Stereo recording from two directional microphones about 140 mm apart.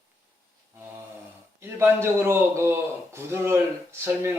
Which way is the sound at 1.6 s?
20° right (ahead or behind).